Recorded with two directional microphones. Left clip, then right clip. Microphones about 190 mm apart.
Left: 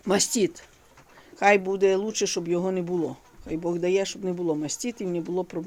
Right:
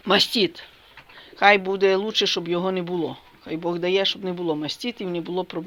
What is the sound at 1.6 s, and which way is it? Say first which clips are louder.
Speech: right 2 dB; 15° left (ahead or behind).